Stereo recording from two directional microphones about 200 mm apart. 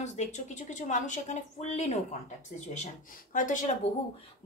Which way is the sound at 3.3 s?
40° left (ahead or behind).